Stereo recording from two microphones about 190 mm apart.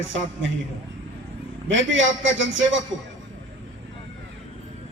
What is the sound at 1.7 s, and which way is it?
A man's voice, 80° right.